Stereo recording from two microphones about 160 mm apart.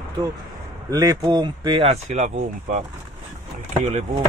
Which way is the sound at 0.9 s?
20° right (ahead or behind).